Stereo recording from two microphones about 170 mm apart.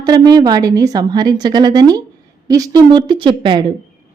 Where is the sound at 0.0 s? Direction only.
25° right (ahead or behind).